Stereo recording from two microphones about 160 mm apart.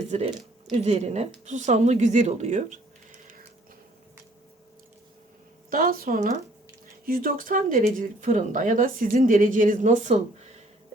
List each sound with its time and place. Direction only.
0.8 s speech: 45° right (ahead or behind)
5.7 s speech: 65° right (ahead or behind)